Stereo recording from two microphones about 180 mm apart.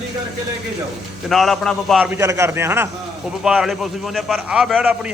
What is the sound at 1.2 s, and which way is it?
Speech, centre (ahead or behind).